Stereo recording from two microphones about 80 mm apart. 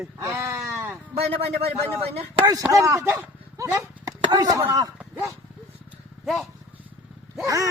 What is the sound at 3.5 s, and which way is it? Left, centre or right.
Horse, right.